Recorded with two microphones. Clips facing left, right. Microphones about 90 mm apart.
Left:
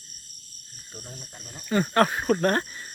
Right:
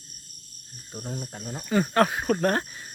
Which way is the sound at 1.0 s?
45° right (ahead or behind).